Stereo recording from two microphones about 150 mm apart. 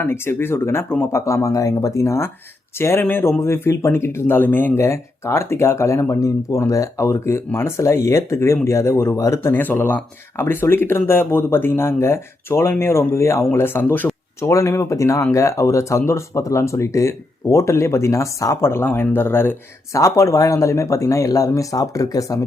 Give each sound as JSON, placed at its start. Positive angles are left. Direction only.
{"t": 0.0, "sound": "speech", "side_deg": 15}